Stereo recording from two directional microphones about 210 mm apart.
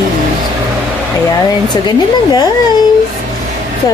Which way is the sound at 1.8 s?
20° left (ahead or behind).